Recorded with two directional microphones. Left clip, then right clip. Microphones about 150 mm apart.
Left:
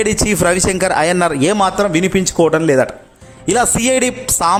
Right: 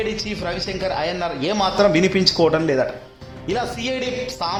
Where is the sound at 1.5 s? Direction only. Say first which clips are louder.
Left 2 dB; 30° left (ahead or behind).